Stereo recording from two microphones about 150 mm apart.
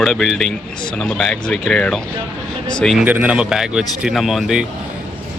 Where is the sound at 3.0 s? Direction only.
10° right (ahead or behind).